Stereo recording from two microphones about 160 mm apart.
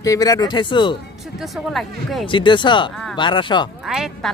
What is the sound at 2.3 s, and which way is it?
Speech, 30° left (ahead or behind).